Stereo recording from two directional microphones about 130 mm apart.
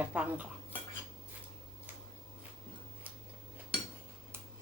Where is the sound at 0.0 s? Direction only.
10° right (ahead or behind).